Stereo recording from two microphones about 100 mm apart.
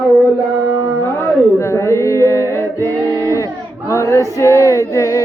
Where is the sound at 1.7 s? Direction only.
30° left (ahead or behind).